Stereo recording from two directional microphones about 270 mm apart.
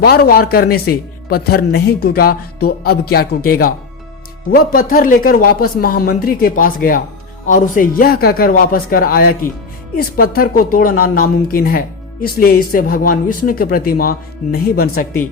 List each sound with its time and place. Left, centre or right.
0.0 s a woman's voice: left